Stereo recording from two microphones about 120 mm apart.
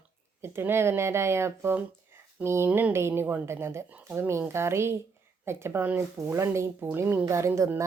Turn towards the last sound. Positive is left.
turn(degrees=-20)  # may be behind; listen again after turning